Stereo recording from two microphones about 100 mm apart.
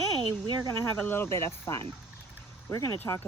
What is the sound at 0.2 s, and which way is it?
Speech, 45° right (ahead or behind).